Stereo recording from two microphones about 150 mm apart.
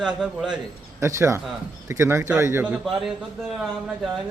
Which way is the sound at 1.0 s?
20° right (ahead or behind).